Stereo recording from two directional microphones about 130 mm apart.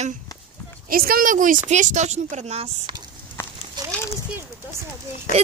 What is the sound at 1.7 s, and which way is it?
A woman's voice, 65° right (ahead or behind).